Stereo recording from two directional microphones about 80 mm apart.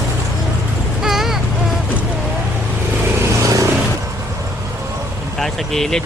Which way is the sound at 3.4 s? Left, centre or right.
Right.